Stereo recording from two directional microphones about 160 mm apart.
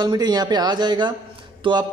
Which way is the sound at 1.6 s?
30° right (ahead or behind).